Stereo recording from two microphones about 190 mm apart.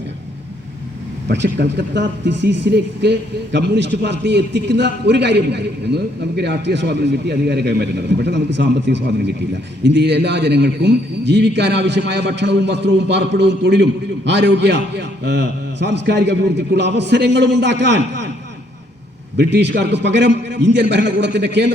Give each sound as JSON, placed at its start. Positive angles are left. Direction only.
{"t": 1.3, "sound": "speech", "side_deg": -65}
{"t": 19.4, "sound": "a man's voice", "side_deg": -65}